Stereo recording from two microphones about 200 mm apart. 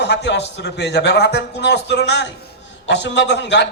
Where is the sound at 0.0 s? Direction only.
60° left (ahead or behind).